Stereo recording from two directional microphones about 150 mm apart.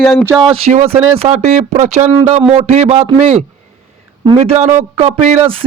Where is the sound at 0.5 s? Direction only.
45° right (ahead or behind).